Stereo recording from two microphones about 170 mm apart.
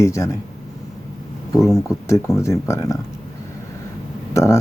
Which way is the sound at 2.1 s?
15° left (ahead or behind).